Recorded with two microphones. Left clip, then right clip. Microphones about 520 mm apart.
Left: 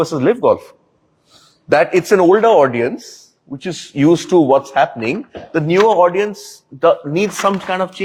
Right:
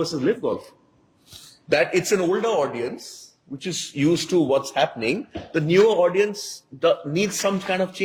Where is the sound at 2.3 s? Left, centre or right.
Left.